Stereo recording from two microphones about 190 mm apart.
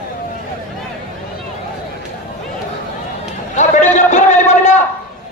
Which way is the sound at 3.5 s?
40° left (ahead or behind).